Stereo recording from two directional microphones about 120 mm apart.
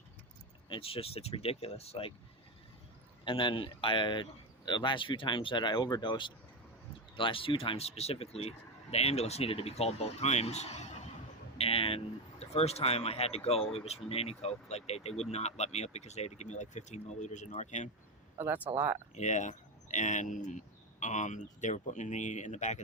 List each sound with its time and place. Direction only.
0.7 s speech: 50° left (ahead or behind)
3.2 s speech: 45° left (ahead or behind); by 11.1 s 70° left (ahead or behind)
11.5 s speech: 55° left (ahead or behind); by 17.8 s 75° left (ahead or behind)
18.3 s speech: 15° right (ahead or behind)
19.1 s speech: 85° left